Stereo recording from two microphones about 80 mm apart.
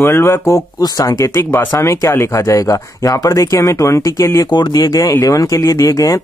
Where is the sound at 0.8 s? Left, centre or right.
Left.